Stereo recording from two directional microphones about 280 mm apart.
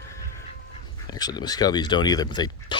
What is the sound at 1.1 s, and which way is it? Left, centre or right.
Speech, centre.